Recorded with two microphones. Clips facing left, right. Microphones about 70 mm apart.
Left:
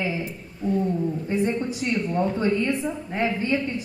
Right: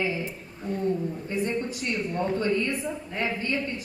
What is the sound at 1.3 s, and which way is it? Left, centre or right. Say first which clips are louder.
A woman's voice: left 3 dB; left.